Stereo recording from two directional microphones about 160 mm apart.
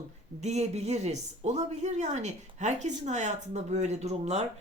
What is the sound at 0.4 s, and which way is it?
Speech, 45° right (ahead or behind).